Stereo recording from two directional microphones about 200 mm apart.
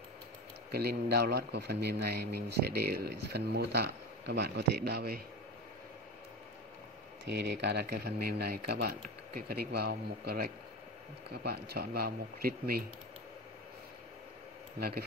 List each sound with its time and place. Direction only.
0.7 s speech: 55° right (ahead or behind)
7.2 s speech: 55° right (ahead or behind)
14.8 s speech: 50° right (ahead or behind)